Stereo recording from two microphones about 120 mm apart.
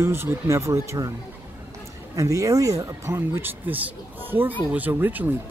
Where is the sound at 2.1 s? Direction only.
25° right (ahead or behind).